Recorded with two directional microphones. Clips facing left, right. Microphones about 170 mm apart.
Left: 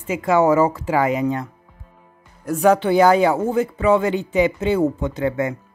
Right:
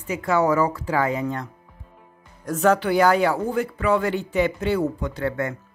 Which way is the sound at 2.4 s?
10° left (ahead or behind).